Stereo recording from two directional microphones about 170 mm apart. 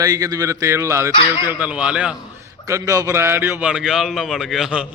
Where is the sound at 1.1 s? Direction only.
30° left (ahead or behind).